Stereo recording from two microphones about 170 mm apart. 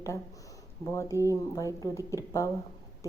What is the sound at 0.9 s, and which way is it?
A woman's voice, 15° left (ahead or behind).